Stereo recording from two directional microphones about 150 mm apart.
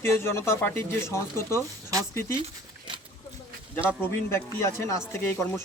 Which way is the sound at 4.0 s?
15° left (ahead or behind).